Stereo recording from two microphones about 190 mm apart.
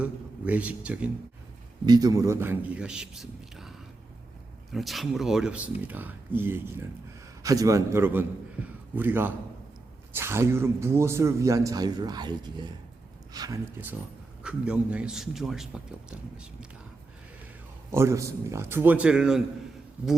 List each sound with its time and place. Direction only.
0.0 s a man's voice: 5° right (ahead or behind)
1.9 s speech: 20° right (ahead or behind); by 3.7 s centre (ahead or behind)
4.7 s a man's voice: centre (ahead or behind); by 13.6 s 20° right (ahead or behind)
14.4 s a man's voice: 5° right (ahead or behind)
17.9 s speech: 15° right (ahead or behind)